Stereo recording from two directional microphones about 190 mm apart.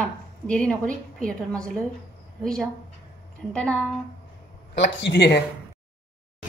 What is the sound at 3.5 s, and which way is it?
Speech, 5° left (ahead or behind).